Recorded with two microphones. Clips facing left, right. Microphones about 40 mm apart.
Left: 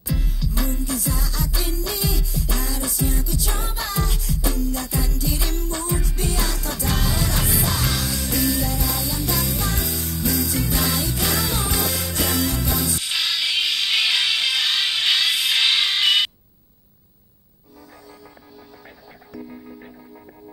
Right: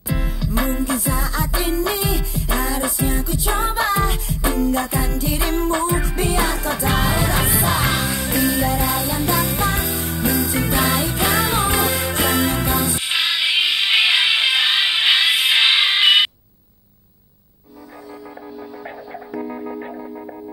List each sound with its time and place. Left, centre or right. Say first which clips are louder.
0.0 s music: right 4 dB; right
18.9 s music: right 11 dB; right